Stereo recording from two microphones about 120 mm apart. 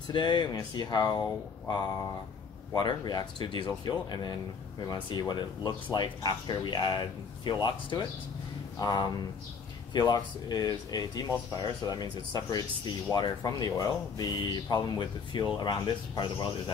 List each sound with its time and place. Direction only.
0.1 s speech: 40° left (ahead or behind)
2.7 s speech: 35° left (ahead or behind)